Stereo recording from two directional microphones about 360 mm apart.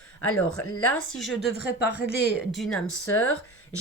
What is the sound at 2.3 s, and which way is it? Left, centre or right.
Speech, centre.